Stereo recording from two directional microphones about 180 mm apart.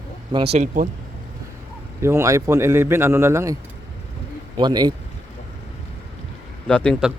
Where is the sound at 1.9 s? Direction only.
15° right (ahead or behind).